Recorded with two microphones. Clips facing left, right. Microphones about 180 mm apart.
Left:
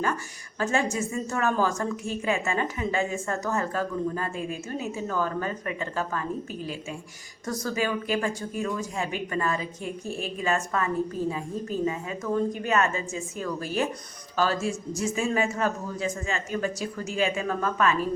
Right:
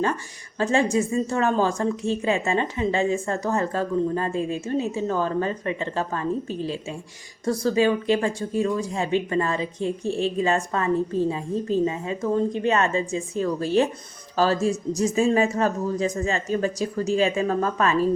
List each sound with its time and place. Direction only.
0.6 s speech: 30° right (ahead or behind)
7.4 s speech: 30° right (ahead or behind)